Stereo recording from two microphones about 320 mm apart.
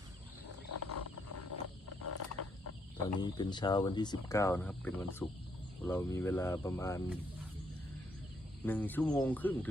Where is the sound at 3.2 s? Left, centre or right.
Centre.